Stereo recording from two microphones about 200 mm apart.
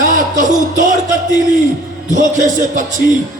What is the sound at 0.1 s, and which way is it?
Music, 40° right (ahead or behind).